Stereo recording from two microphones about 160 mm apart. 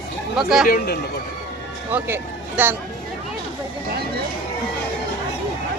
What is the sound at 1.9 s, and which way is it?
Speech, 15° right (ahead or behind).